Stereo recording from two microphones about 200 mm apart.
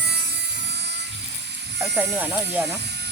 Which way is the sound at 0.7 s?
60° right (ahead or behind).